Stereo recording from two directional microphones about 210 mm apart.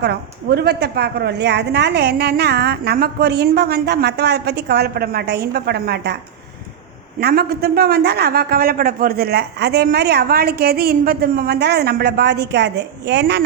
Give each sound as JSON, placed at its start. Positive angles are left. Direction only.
{"t": 0.0, "sound": "a man's voice", "side_deg": -50}
{"t": 7.2, "sound": "a man's voice", "side_deg": -50}